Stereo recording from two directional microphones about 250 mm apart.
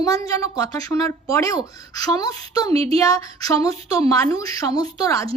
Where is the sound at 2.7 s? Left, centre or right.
Right.